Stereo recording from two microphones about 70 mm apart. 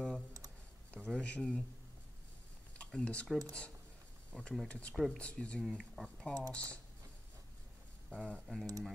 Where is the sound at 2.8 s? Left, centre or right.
Centre.